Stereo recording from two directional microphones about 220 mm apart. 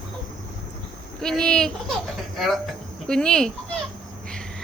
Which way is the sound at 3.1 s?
5° left (ahead or behind).